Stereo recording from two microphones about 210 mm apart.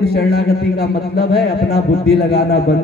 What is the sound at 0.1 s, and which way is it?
A man's voice, 50° left (ahead or behind).